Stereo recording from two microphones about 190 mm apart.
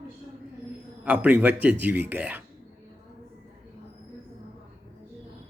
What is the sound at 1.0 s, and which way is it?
Speech, 5° right (ahead or behind).